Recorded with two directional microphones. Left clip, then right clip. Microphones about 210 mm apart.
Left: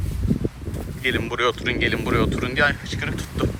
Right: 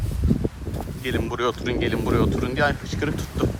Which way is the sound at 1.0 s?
15° right (ahead or behind).